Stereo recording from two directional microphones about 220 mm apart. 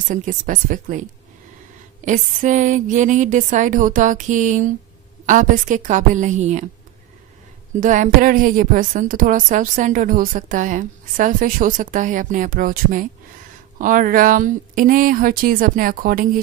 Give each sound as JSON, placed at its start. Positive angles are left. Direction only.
{"t": 0.1, "sound": "a woman's voice", "side_deg": -35}
{"t": 2.0, "sound": "a woman's voice", "side_deg": -35}
{"t": 7.8, "sound": "a woman's voice", "side_deg": -35}